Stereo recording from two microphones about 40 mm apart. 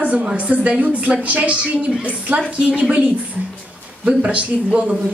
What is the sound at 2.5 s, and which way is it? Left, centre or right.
Speech, centre.